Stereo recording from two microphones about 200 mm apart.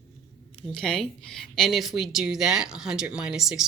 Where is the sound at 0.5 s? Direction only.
5° left (ahead or behind).